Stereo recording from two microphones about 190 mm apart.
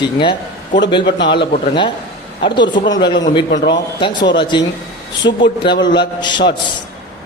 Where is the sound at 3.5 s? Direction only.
65° left (ahead or behind).